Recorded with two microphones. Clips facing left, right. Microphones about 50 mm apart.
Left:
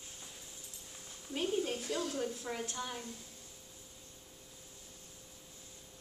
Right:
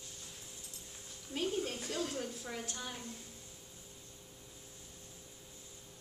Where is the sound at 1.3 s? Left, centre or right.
Centre.